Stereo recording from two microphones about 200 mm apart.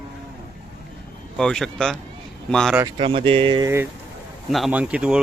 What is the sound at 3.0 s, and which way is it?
Speech, 25° right (ahead or behind).